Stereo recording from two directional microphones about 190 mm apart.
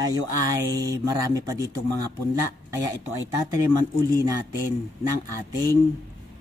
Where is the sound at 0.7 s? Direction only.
15° right (ahead or behind).